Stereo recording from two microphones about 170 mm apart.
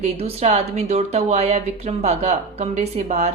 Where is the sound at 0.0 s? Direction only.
40° right (ahead or behind).